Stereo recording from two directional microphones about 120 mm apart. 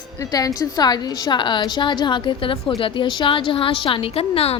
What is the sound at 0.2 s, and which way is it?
A woman's voice, 30° left (ahead or behind).